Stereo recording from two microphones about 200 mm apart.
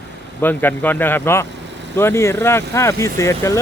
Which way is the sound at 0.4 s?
10° left (ahead or behind).